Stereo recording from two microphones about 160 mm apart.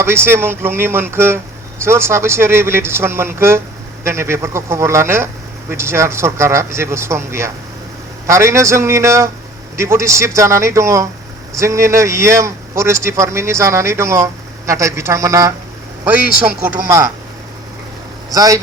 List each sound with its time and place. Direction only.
0.0 s speech: 15° right (ahead or behind)
18.3 s speech: 20° right (ahead or behind)